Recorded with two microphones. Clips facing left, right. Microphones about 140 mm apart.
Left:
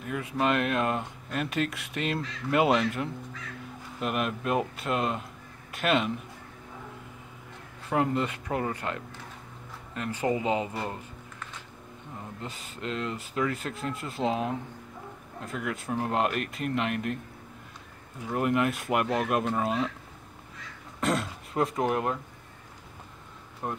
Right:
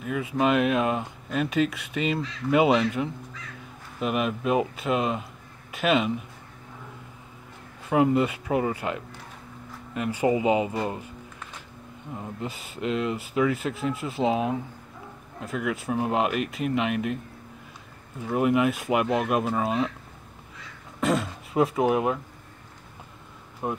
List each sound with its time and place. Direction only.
0.0 s speech: 5° right (ahead or behind)
7.9 s speech: 10° right (ahead or behind)
10.8 s a sound: 15° right (ahead or behind)
12.2 s speech: 10° right (ahead or behind)
18.3 s speech: 5° right (ahead or behind)
21.0 s speech: centre (ahead or behind)
23.6 s speech: 5° right (ahead or behind)